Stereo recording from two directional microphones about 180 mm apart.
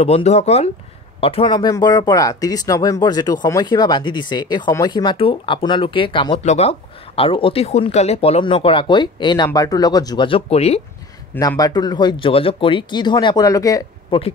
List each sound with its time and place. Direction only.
0.0 s speech: 35° left (ahead or behind)
6.4 s speech: 40° left (ahead or behind)
11.3 s speech: 20° left (ahead or behind)